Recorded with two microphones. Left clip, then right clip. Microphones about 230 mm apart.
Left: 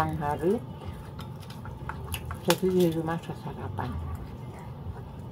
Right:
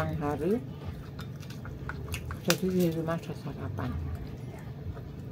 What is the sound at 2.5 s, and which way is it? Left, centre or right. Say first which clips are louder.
Speech: left 3 dB; centre.